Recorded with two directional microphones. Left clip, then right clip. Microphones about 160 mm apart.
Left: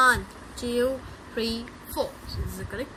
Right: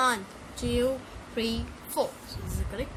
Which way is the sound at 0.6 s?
20° right (ahead or behind).